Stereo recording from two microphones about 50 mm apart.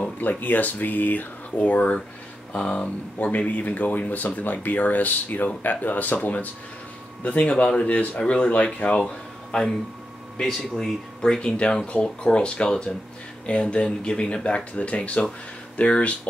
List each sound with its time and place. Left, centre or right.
0.0 s speech: left
8.9 s a sound: centre
10.8 s speech: centre; by 16.2 s left